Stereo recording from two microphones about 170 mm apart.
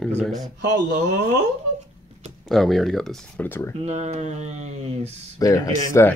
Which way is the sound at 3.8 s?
40° right (ahead or behind).